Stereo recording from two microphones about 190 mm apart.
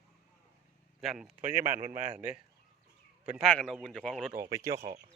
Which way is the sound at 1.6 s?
45° right (ahead or behind).